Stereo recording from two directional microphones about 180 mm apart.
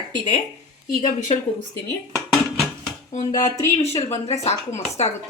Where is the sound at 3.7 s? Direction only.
35° left (ahead or behind).